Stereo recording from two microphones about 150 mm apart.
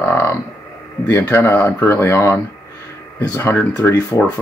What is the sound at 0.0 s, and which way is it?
Livestock, 15° left (ahead or behind).